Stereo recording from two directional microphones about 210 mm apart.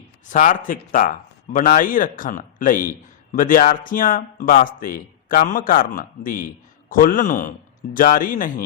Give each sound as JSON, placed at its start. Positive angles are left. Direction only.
{"t": 0.3, "sound": "a man's voice", "side_deg": 40}